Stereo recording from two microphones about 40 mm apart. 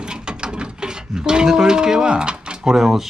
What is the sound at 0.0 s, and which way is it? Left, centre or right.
Speech, right.